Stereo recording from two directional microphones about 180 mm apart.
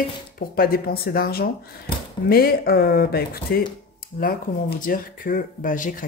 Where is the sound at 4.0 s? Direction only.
55° left (ahead or behind).